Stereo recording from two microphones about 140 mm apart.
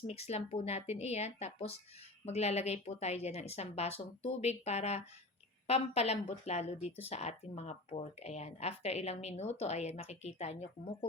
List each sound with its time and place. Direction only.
0.1 s speech: 50° left (ahead or behind)